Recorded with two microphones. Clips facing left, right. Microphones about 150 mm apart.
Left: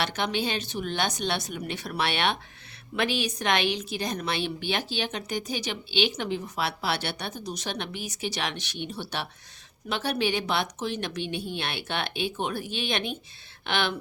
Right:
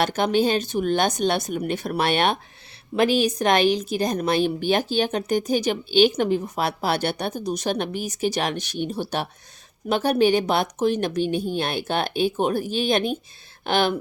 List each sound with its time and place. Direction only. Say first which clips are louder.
0.0 s a woman's voice: right 8 dB; 45° right (ahead or behind)